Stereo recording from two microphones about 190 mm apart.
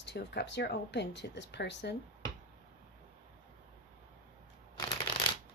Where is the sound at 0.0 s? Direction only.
60° left (ahead or behind).